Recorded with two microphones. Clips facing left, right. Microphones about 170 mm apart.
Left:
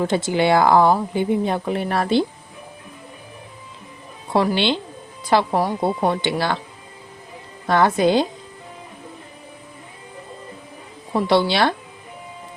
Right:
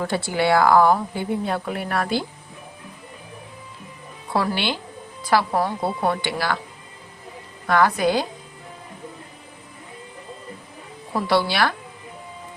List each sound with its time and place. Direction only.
0.0 s a woman's voice: 20° left (ahead or behind)
4.3 s a woman's voice: 25° left (ahead or behind)
7.7 s a woman's voice: 25° left (ahead or behind)
11.1 s a woman's voice: 25° left (ahead or behind)